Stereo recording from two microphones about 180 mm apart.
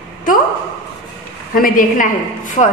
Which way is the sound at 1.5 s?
50° left (ahead or behind).